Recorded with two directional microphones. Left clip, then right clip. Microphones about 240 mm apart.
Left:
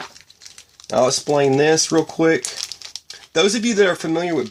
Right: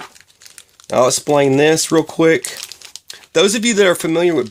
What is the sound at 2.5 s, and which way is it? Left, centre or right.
Crumpling, centre.